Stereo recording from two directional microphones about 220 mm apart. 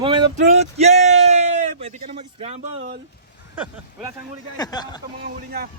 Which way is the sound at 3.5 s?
5° right (ahead or behind).